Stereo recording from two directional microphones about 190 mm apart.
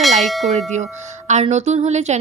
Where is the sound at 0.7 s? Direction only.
40° right (ahead or behind).